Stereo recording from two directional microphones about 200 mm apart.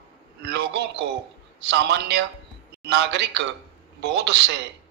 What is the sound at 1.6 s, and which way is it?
A man's voice, 60° right (ahead or behind).